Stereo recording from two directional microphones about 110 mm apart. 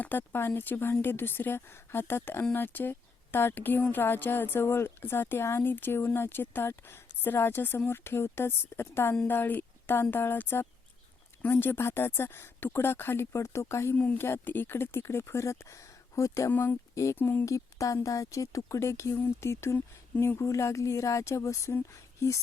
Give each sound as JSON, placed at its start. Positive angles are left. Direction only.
{"t": 0.0, "sound": "speech", "side_deg": 15}
{"t": 13.9, "sound": "speech", "side_deg": 15}
{"t": 16.5, "sound": "speech", "side_deg": 15}
{"t": 17.4, "sound": "speech", "side_deg": 30}